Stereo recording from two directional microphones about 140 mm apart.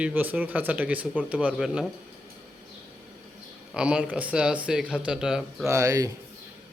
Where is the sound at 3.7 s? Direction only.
5° right (ahead or behind).